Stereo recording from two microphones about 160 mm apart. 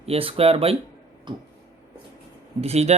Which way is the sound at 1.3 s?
30° right (ahead or behind).